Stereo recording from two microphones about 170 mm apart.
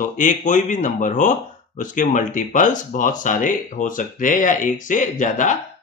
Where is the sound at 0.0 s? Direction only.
50° left (ahead or behind).